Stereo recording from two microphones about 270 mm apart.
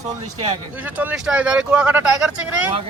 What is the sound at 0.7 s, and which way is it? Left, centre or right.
Speech, centre.